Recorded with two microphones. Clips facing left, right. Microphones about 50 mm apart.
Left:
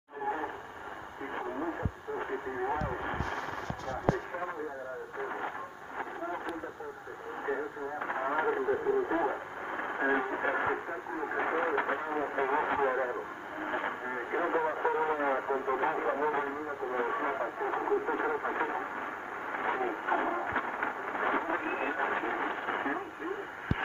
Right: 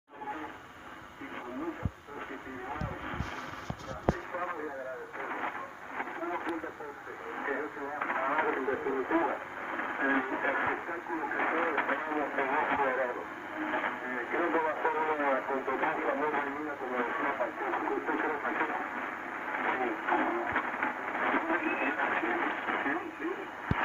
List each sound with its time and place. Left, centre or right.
5.2 s speech: right
7.4 s speech: right
19.5 s radio: right